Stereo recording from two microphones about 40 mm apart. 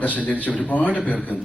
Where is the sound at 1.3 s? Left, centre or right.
Right.